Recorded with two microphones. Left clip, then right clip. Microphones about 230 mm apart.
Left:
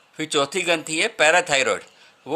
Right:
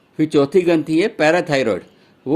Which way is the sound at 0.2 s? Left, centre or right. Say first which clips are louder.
Right 7 dB; left.